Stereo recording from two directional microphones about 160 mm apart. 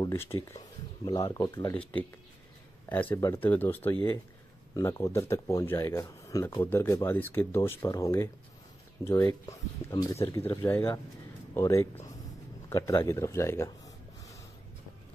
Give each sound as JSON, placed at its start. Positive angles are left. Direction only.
{"t": 0.0, "sound": "speech", "side_deg": 15}
{"t": 2.9, "sound": "speech", "side_deg": 10}